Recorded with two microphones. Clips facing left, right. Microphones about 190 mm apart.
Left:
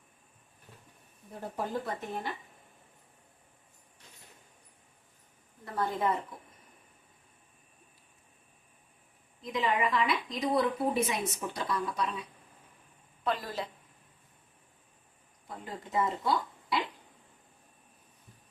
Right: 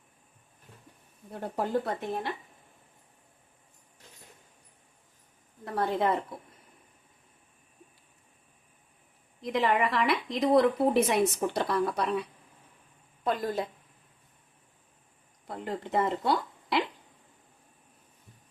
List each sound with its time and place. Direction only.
1.3 s a woman's voice: 65° right (ahead or behind)
5.7 s a woman's voice: 75° right (ahead or behind)
9.4 s a woman's voice: 70° right (ahead or behind)
13.2 s a woman's voice: 50° right (ahead or behind)
15.4 s speech: 70° right (ahead or behind)